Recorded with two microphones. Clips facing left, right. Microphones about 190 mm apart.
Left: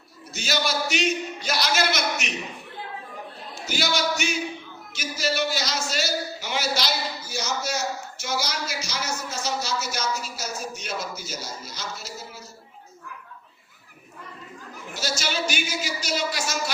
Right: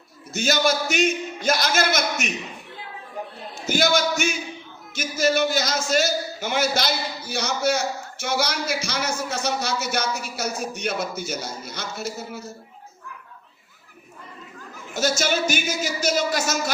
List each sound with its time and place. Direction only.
0.3 s a man's voice: 50° right (ahead or behind)
3.7 s a man's voice: 50° right (ahead or behind)
15.2 s a man's voice: 50° right (ahead or behind)